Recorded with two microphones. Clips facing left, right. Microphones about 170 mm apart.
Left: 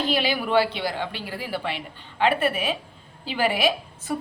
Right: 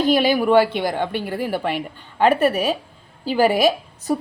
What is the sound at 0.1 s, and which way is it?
A woman's voice, 45° right (ahead or behind).